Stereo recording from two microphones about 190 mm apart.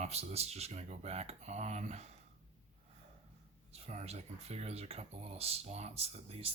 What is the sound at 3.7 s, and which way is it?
Speech, 35° right (ahead or behind).